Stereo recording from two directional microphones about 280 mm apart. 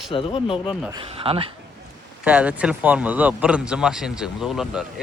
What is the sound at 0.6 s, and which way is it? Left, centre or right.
Speech, centre.